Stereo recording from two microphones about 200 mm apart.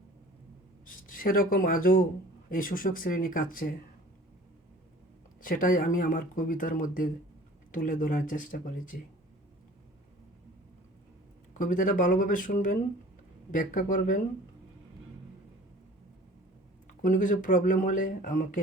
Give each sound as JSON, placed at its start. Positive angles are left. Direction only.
{"t": 0.9, "sound": "speech", "side_deg": 45}
{"t": 5.4, "sound": "speech", "side_deg": 45}
{"t": 11.5, "sound": "speech", "side_deg": 40}
{"t": 17.0, "sound": "speech", "side_deg": 40}